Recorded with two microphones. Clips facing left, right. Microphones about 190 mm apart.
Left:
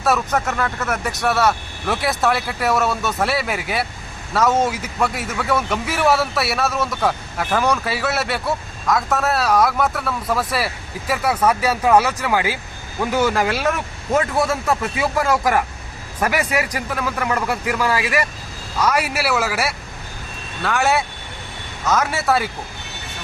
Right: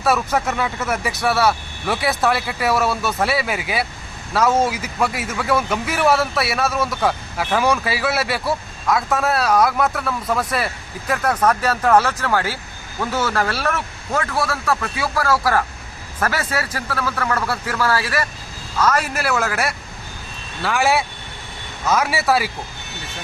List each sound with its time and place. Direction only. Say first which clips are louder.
0.0 s a man's voice: even; centre (ahead or behind)